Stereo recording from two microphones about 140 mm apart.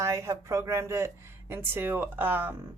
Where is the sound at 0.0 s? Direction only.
20° right (ahead or behind).